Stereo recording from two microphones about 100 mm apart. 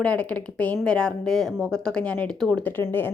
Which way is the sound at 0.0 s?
10° left (ahead or behind).